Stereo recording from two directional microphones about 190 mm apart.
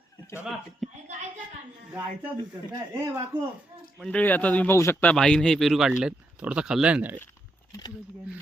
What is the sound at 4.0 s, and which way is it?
A man's voice, 5° left (ahead or behind).